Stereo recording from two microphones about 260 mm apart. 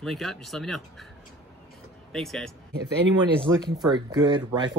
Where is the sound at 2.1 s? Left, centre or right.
Centre.